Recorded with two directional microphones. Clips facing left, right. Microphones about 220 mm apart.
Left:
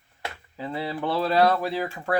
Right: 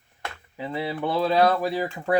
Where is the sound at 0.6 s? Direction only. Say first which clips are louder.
Right 1 dB; 15° right (ahead or behind).